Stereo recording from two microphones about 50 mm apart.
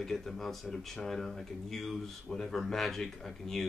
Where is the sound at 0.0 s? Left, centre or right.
Centre.